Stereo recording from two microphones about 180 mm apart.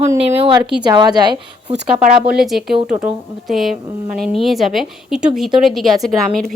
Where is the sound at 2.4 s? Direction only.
Centre (ahead or behind).